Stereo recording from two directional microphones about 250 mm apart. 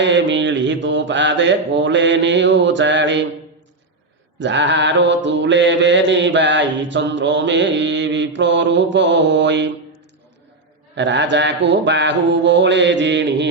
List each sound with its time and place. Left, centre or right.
0.0 s mantra: right
4.4 s mantra: right
10.9 s mantra: right